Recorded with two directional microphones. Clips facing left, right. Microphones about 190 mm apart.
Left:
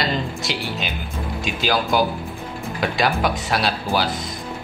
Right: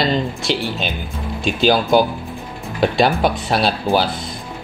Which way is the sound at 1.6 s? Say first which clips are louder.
Right 6 dB; 25° right (ahead or behind).